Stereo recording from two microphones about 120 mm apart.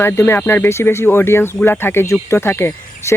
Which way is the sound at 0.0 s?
20° left (ahead or behind).